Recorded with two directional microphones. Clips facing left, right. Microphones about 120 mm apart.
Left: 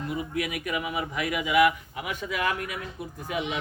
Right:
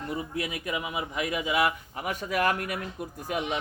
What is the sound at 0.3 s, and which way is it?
A man's voice, 30° right (ahead or behind).